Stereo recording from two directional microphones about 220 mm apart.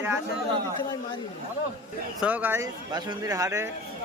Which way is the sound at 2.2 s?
10° right (ahead or behind).